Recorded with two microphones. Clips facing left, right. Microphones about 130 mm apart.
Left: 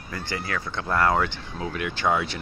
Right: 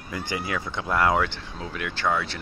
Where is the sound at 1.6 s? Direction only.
5° left (ahead or behind).